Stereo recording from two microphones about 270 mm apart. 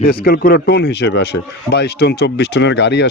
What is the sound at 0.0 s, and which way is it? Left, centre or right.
Speech, left.